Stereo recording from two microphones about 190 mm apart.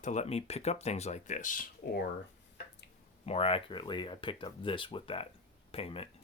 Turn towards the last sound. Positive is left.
turn(degrees=30)  # may be behind; listen again after turning